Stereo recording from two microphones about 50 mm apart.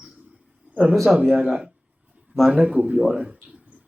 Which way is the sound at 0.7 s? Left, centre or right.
Right.